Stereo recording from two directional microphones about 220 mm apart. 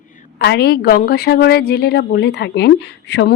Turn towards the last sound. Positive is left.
turn(degrees=50)  # may be behind; listen again after turning